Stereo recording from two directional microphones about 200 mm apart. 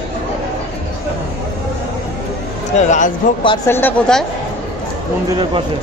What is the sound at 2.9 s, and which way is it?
Speech, 40° left (ahead or behind).